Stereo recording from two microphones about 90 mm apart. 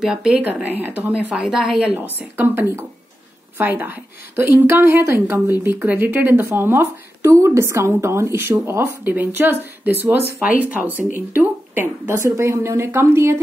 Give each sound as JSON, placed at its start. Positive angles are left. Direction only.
{"t": 0.0, "sound": "speech", "side_deg": -5}
{"t": 0.7, "sound": "a woman's voice", "side_deg": -20}
{"t": 1.3, "sound": "a woman's voice", "side_deg": -5}
{"t": 2.3, "sound": "a woman's voice", "side_deg": -25}